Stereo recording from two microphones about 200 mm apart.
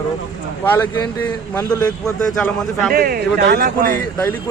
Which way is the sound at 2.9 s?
45° right (ahead or behind).